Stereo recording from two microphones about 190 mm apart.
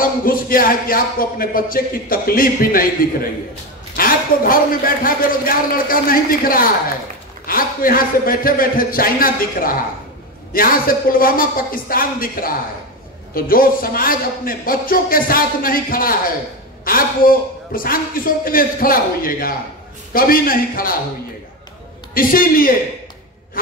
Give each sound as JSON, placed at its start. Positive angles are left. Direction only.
{"t": 0.0, "sound": "speech", "side_deg": 50}
{"t": 22.1, "sound": "speech", "side_deg": 50}